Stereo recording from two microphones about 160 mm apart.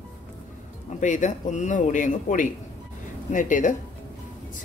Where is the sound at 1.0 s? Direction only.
50° left (ahead or behind).